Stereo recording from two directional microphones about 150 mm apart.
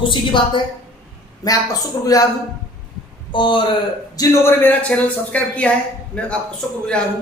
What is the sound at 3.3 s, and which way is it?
A man's voice, 30° left (ahead or behind).